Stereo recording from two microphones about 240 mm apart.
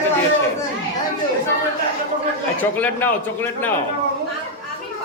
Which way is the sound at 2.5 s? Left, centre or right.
Centre.